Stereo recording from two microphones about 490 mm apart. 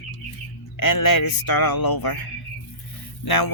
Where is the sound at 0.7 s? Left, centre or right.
Left.